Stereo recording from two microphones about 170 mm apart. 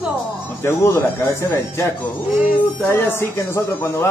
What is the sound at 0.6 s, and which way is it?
Speech, 15° left (ahead or behind).